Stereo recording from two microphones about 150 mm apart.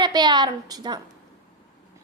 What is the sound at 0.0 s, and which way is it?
A woman's voice, 30° right (ahead or behind).